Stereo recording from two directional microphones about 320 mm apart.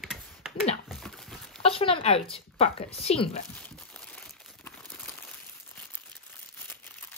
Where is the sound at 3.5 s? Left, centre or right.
Centre.